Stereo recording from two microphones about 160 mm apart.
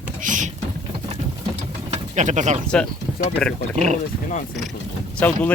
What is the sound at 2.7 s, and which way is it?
Speech, 5° left (ahead or behind).